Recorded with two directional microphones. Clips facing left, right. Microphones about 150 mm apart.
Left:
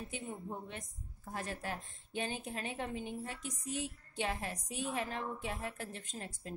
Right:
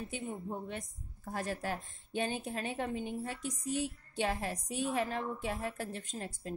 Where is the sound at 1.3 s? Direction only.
35° right (ahead or behind).